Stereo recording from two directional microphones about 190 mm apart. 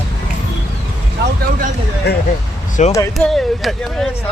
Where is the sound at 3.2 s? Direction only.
Centre (ahead or behind).